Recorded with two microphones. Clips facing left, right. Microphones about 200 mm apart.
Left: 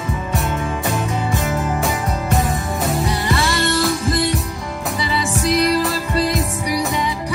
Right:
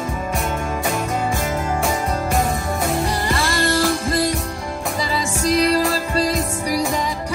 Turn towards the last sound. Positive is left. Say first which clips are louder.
# even
turn(degrees=-35)  # may be behind; listen again after turning